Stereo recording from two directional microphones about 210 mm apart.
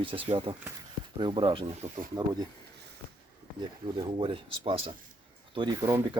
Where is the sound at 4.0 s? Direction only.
20° right (ahead or behind).